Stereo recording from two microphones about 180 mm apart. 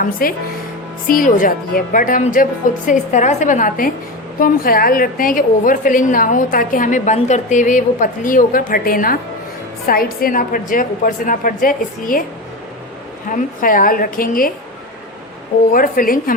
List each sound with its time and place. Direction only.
0.0 s a woman's voice: 55° left (ahead or behind)
13.3 s a woman's voice: 50° left (ahead or behind)
15.7 s a woman's voice: 50° left (ahead or behind)